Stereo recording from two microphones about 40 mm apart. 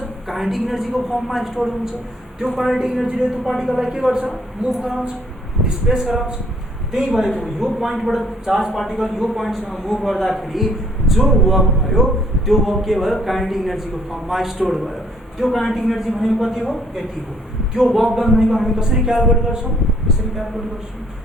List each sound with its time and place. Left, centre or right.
0.3 s a man's voice: centre
5.6 s a man's voice: right
6.9 s a man's voice: centre
18.8 s a man's voice: centre